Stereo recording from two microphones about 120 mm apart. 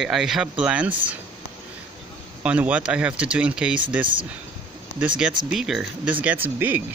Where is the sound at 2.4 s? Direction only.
10° right (ahead or behind).